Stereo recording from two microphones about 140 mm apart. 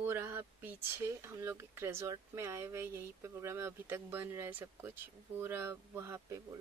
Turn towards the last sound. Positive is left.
turn(degrees=-20)  # may be behind; listen again after turning